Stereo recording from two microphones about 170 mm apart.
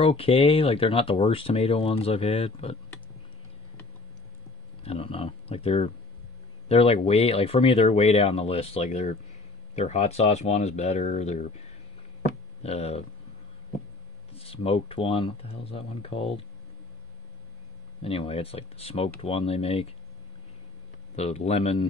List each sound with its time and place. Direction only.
0.0 s speech: 35° left (ahead or behind)
4.8 s speech: 30° left (ahead or behind)
14.3 s speech: 35° left (ahead or behind)
18.0 s speech: 35° left (ahead or behind)
21.2 s speech: 40° left (ahead or behind)